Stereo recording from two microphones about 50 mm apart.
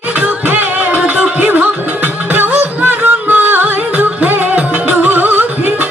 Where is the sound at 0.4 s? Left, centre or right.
Right.